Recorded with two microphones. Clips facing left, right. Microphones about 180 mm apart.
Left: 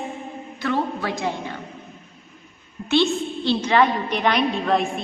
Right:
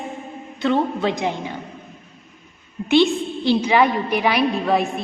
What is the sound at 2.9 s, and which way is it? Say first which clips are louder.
A woman's voice: right 4 dB; 15° right (ahead or behind).